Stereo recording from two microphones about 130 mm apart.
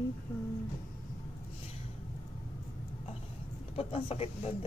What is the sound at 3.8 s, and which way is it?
Speech, 50° left (ahead or behind).